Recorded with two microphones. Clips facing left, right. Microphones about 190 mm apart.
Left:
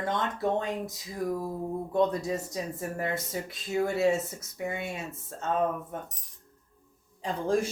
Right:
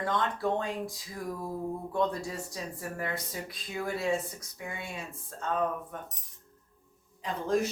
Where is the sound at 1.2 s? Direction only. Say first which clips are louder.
Left 7 dB; 50° left (ahead or behind).